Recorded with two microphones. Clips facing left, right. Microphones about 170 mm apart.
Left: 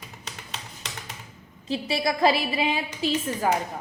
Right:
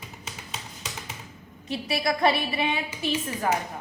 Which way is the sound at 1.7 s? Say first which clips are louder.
Left 1 dB; 25° left (ahead or behind).